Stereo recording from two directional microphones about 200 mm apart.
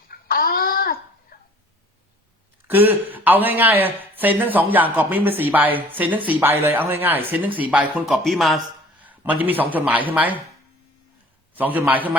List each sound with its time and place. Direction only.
0.1 s a sound: 50° left (ahead or behind)
2.6 s speech: 10° right (ahead or behind)
11.5 s speech: 10° right (ahead or behind)